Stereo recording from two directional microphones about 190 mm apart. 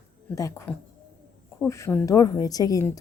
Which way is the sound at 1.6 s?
10° left (ahead or behind).